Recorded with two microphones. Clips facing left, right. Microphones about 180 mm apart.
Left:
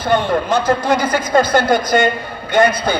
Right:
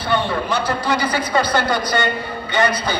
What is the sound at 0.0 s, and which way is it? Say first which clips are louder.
A woman's voice: left 4 dB; 45° left (ahead or behind).